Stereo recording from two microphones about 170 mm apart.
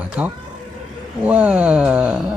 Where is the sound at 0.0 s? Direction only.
10° right (ahead or behind).